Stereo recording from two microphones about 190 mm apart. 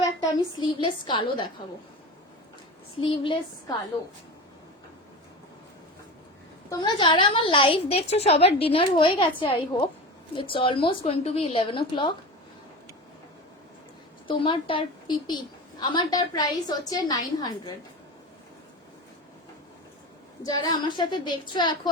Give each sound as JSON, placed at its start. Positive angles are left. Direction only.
{"t": 0.6, "sound": "a woman's voice", "side_deg": 25}
{"t": 3.0, "sound": "a woman's voice", "side_deg": 25}
{"t": 6.7, "sound": "a woman's voice", "side_deg": 25}
{"t": 14.3, "sound": "a woman's voice", "side_deg": 25}
{"t": 20.4, "sound": "a woman's voice", "side_deg": 20}